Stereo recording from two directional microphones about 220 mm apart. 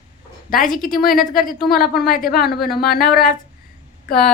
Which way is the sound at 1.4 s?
40° left (ahead or behind).